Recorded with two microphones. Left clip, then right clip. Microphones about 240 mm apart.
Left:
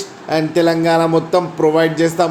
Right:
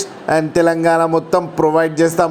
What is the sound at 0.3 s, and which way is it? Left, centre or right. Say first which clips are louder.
Speech: right 1 dB; right.